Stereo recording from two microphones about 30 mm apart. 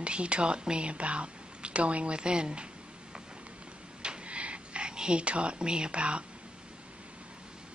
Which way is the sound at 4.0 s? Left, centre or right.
Right.